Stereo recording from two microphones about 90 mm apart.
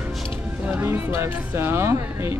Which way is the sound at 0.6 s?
25° right (ahead or behind).